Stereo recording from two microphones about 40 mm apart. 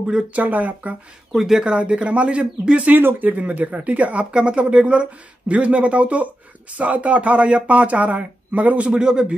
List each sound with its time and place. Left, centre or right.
0.3 s speech: right
1.3 s speech: centre
1.7 s speech: right
3.0 s speech: right
3.3 s speech: right
4.3 s speech: right
8.9 s speech: right